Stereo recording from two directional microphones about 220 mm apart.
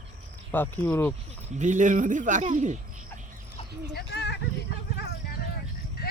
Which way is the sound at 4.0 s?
50° left (ahead or behind).